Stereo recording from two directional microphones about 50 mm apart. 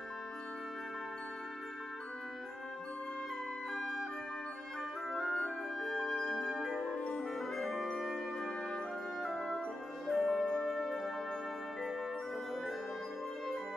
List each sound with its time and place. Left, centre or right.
3.7 s music: centre
5.2 s music: left
5.8 s music: centre
7.0 s music: left
7.3 s music: centre
10.0 s music: centre